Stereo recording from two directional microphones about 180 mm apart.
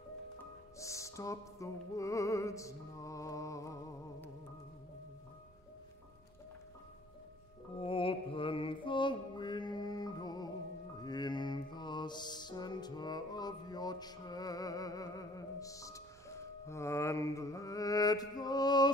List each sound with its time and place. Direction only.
0.7 s music: 15° left (ahead or behind)
7.8 s mantra: 30° left (ahead or behind)
11.0 s music: 25° left (ahead or behind)